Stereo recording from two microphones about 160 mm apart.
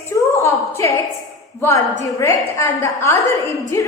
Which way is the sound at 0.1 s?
20° left (ahead or behind).